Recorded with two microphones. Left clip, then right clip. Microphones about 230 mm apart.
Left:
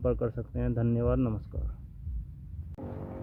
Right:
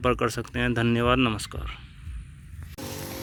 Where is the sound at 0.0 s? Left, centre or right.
Centre.